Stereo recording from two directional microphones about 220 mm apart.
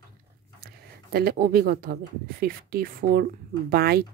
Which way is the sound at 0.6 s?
45° right (ahead or behind).